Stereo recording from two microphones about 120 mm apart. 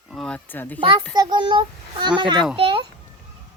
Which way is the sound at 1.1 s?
40° right (ahead or behind).